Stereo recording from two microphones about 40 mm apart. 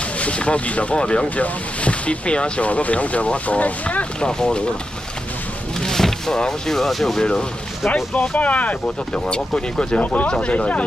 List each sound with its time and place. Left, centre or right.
0.2 s speech: left
1.3 s speech: left
4.2 s speech: centre
5.8 s speech: centre
7.2 s speech: centre
7.9 s speech: left
9.5 s speech: left